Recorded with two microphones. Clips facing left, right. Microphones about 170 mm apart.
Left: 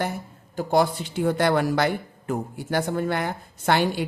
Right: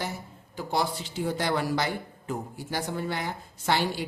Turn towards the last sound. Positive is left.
turn(degrees=55)  # may be behind; listen again after turning